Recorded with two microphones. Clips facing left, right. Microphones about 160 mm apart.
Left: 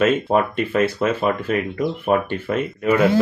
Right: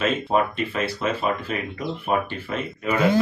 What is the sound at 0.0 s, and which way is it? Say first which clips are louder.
Speech: left 4 dB; 50° left (ahead or behind).